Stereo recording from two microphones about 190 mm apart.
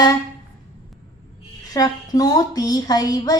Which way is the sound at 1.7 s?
20° left (ahead or behind).